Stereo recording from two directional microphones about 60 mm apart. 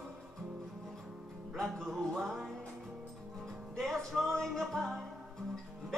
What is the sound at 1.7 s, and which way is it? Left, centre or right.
Music, centre.